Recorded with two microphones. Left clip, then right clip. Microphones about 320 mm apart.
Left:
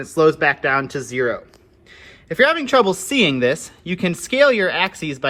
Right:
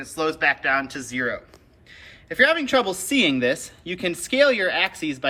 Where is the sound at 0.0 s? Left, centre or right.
Centre.